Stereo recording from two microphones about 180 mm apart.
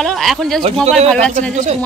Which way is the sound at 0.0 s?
Centre (ahead or behind).